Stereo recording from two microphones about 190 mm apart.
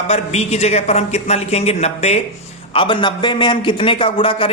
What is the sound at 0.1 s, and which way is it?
A man's voice, 35° left (ahead or behind).